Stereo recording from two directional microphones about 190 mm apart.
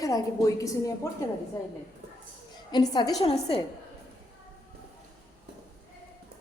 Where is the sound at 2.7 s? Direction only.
20° left (ahead or behind).